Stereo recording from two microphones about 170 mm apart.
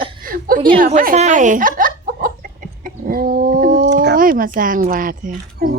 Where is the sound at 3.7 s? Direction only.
80° right; by 5.7 s 60° right (ahead or behind).